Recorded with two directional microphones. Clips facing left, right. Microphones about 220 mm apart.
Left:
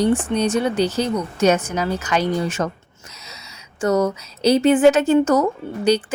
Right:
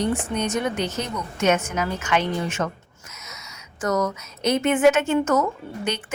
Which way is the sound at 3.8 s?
30° left (ahead or behind).